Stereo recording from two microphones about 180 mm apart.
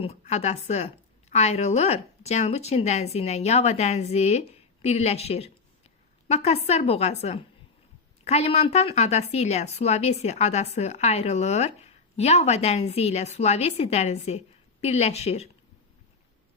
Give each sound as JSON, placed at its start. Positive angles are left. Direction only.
{"t": 0.0, "sound": "a woman's voice", "side_deg": 35}